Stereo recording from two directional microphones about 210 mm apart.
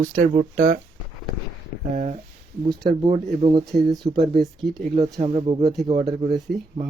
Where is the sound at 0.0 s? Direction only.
40° right (ahead or behind).